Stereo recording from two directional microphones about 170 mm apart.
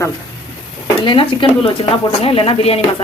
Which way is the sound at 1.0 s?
30° left (ahead or behind).